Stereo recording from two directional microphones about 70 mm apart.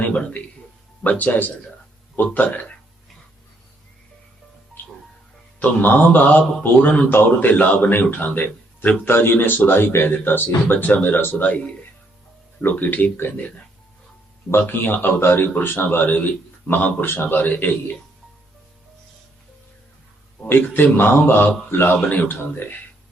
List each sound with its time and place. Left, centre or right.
0.0 s a man's voice: centre
5.5 s a man's voice: left
14.5 s a man's voice: left
20.5 s a man's voice: left